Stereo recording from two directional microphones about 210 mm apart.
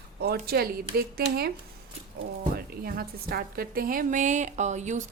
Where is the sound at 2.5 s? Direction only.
45° right (ahead or behind).